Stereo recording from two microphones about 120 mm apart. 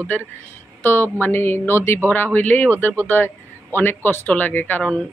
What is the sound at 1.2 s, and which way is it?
Speech, 20° left (ahead or behind).